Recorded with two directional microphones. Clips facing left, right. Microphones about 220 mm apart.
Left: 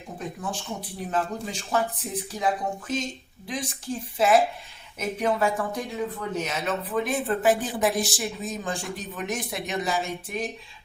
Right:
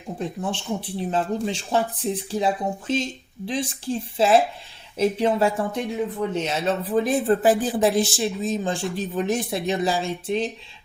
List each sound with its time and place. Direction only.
0.2 s speech: 30° right (ahead or behind)